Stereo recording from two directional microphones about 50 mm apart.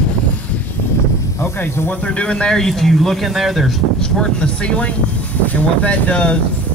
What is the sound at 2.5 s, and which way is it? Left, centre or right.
Speech, centre.